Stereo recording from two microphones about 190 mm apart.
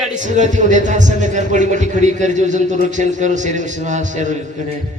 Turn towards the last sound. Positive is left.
turn(degrees=-40)  # may be behind; listen again after turning